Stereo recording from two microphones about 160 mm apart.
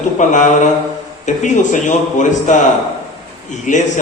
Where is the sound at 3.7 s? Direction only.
55° left (ahead or behind).